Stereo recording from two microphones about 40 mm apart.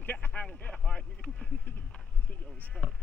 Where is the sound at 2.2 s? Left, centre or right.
Left.